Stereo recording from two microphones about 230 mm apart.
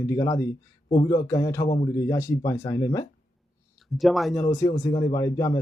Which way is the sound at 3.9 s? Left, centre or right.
Centre.